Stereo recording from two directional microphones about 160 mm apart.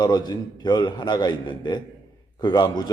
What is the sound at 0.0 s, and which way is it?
A man's voice, 25° left (ahead or behind).